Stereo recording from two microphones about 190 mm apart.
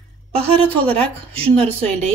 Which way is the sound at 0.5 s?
30° right (ahead or behind).